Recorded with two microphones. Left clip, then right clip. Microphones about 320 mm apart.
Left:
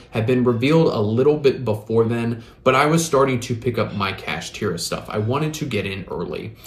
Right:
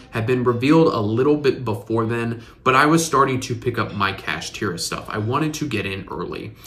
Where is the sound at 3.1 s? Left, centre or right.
Centre.